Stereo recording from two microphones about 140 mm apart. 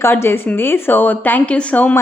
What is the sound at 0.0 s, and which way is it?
A woman's voice, 15° left (ahead or behind).